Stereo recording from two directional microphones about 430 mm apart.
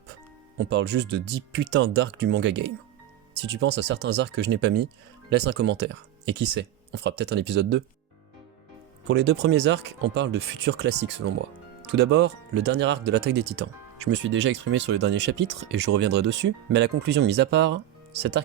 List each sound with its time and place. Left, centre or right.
0.6 s speech: right
9.0 s speech: right